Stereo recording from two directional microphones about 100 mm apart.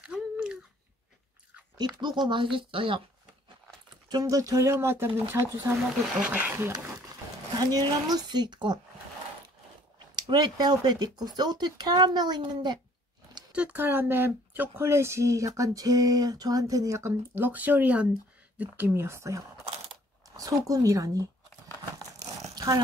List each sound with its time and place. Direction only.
0.0 s a sound: 10° right (ahead or behind)
2.0 s speech: 50° right (ahead or behind)
2.5 s speech: 60° right (ahead or behind)
4.1 s speech: 35° right (ahead or behind)
6.1 s speech: 10° right (ahead or behind)
7.5 s speech: 40° right (ahead or behind)
10.1 s speech: 45° right (ahead or behind)
13.5 s speech: 10° right (ahead or behind); by 17.1 s 30° right (ahead or behind)
17.4 s speech: 15° right (ahead or behind); by 21.3 s 35° right (ahead or behind)
22.6 s a sound: 40° right (ahead or behind)